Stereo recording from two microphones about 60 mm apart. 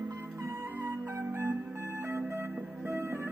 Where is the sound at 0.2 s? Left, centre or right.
Right.